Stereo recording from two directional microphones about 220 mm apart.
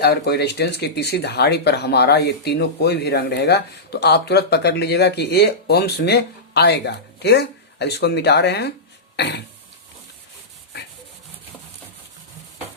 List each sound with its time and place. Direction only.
0.0 s speech: 50° left (ahead or behind)
9.1 s throat clearing: 50° left (ahead or behind)